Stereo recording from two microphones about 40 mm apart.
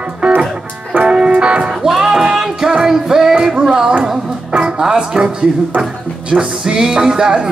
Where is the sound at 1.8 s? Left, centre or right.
Centre.